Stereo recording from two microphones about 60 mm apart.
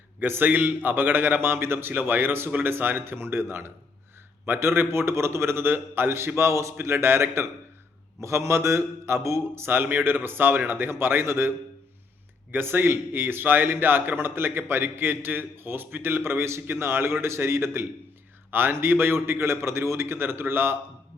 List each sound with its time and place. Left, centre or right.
0.2 s a man's voice: right